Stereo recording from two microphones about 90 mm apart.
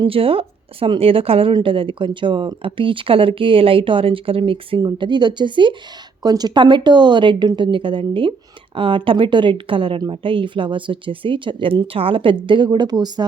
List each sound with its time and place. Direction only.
0.0 s speech: 90° right
1.5 s speech: 75° right (ahead or behind)
4.8 s speech: 55° right (ahead or behind)
6.2 s speech: 50° right (ahead or behind); by 12.4 s 70° right (ahead or behind)
12.5 s speech: 60° right (ahead or behind)